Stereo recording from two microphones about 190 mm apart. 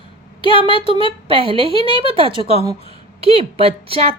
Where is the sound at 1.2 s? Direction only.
30° right (ahead or behind).